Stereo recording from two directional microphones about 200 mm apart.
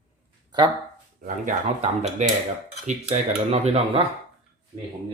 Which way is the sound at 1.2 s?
35° right (ahead or behind).